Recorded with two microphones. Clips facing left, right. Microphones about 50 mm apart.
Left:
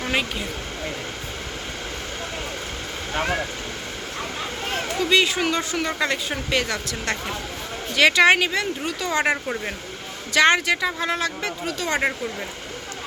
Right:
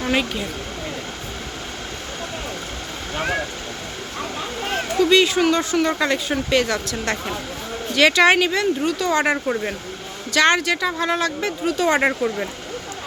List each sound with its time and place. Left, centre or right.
0.1 s speech: centre
5.0 s speech: centre
11.9 s speech: right